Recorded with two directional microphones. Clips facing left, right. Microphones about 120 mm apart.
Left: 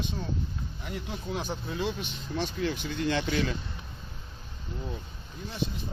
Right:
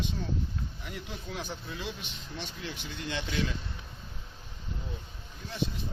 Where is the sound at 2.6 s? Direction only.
55° left (ahead or behind).